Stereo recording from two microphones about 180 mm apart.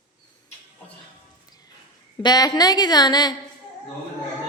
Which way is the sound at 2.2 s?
20° left (ahead or behind).